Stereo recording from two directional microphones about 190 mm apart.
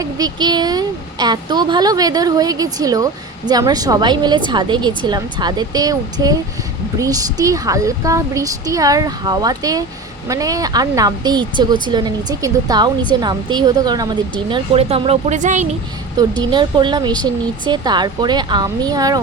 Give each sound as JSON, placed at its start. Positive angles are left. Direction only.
{"t": 0.0, "sound": "a woman's voice", "side_deg": -20}
{"t": 14.5, "sound": "speech", "side_deg": -30}
{"t": 16.4, "sound": "a woman's voice", "side_deg": -25}